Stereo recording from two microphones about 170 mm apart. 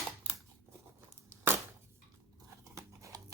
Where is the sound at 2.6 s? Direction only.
15° right (ahead or behind).